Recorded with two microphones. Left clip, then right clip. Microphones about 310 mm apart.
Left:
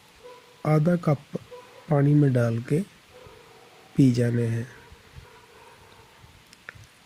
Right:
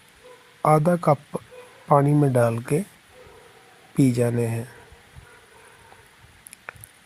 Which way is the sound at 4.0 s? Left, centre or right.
Right.